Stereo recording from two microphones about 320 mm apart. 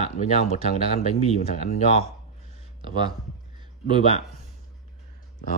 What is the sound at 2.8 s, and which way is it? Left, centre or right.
Speech, centre.